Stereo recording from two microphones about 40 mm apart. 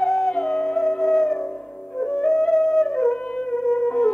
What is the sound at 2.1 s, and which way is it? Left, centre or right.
Flute, centre.